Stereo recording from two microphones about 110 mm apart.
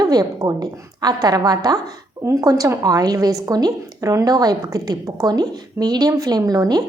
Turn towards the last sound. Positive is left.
turn(degrees=-35)  # may be behind; listen again after turning